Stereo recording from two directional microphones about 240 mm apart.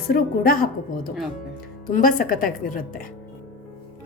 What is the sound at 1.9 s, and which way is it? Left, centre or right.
A woman's voice, left.